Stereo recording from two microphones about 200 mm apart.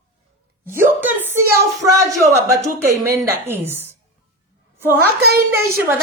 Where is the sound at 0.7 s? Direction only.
10° right (ahead or behind).